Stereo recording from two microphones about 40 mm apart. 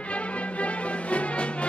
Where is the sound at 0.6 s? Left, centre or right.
Left.